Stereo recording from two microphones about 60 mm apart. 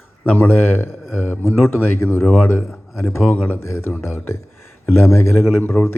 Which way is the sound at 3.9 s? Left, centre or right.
Centre.